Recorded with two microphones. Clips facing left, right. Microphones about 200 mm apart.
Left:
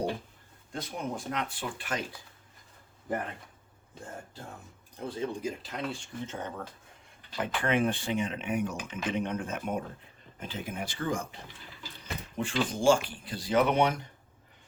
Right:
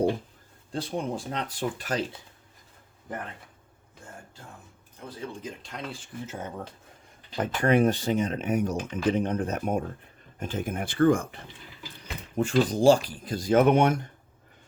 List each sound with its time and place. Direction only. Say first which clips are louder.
0.7 s speech: right 5 dB; 30° right (ahead or behind)
5.0 s speech: left 4 dB; 25° left (ahead or behind)
5.4 s speech: left 3 dB; 5° left (ahead or behind)
7.3 s speech: right 6 dB; 40° right (ahead or behind)
12.4 s speech: right 7 dB; 40° right (ahead or behind)